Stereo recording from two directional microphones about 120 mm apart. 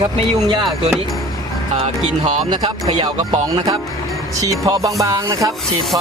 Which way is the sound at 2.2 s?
45° right (ahead or behind).